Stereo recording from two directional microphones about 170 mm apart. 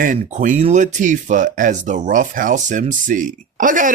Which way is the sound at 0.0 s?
50° right (ahead or behind).